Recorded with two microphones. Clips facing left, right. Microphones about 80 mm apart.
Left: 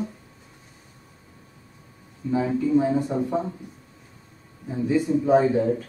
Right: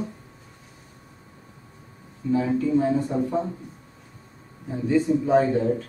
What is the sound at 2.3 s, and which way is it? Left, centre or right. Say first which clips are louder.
Speech: even; left.